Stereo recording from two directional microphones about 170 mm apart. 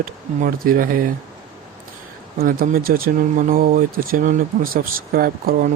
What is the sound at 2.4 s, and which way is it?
Speech, 55° right (ahead or behind).